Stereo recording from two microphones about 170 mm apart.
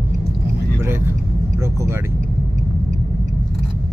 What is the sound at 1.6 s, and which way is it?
Vehicle, 15° right (ahead or behind).